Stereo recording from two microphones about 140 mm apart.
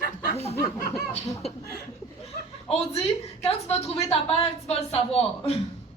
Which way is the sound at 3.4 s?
45° left (ahead or behind).